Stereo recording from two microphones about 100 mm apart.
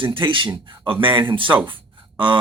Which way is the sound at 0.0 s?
60° right (ahead or behind).